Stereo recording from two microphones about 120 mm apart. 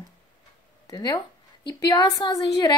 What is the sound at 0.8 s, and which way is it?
A woman's voice, 30° left (ahead or behind).